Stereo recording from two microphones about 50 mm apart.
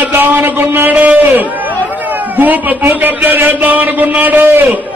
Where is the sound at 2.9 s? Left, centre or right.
Right.